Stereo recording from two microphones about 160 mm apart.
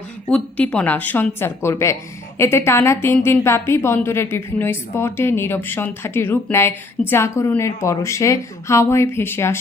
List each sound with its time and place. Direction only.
0.3 s a woman's voice: 5° left (ahead or behind)